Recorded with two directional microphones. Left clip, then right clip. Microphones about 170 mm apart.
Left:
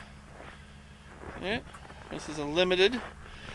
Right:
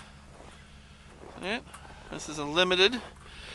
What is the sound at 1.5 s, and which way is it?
Speech, 5° right (ahead or behind).